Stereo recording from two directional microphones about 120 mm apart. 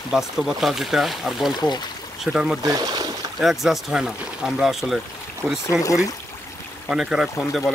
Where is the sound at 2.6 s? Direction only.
30° right (ahead or behind).